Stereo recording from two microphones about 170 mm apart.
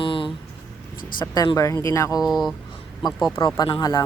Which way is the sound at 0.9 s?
55° left (ahead or behind).